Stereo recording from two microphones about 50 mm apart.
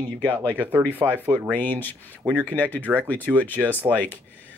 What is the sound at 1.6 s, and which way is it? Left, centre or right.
Speech, left.